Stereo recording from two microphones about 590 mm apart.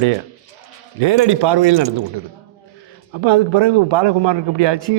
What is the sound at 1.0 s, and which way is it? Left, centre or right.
Speech, right.